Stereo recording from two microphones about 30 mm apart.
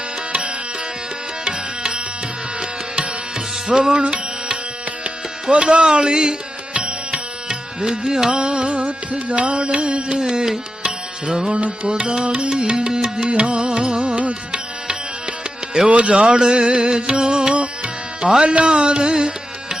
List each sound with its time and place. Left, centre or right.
1.5 s music: right
6.7 s music: right
7.4 s music: right
8.3 s music: right
11.6 s music: right
13.2 s music: right
14.8 s music: right
15.9 s speech: right
16.1 s music: right
17.5 s music: right
18.2 s music: right
18.4 s speech: right
18.7 s music: right